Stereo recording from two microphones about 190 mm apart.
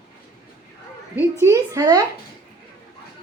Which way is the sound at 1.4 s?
15° right (ahead or behind).